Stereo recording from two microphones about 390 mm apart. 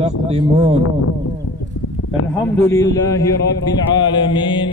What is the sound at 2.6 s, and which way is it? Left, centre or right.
Speech, centre.